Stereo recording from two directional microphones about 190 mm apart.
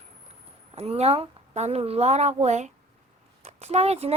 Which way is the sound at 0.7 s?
35° right (ahead or behind).